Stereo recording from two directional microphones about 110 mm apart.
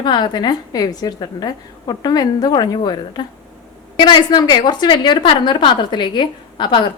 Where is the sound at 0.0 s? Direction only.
40° left (ahead or behind).